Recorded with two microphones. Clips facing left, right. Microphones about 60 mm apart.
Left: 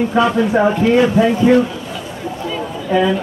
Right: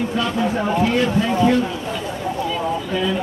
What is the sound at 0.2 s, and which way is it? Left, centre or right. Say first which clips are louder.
A man's voice: left 9 dB; left.